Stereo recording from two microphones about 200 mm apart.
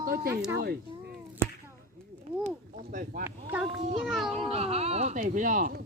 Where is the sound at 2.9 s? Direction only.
45° right (ahead or behind).